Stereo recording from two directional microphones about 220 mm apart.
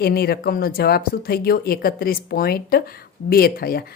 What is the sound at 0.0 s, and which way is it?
A woman's voice, 45° left (ahead or behind).